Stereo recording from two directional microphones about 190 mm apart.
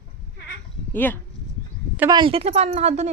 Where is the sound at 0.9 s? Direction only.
10° left (ahead or behind).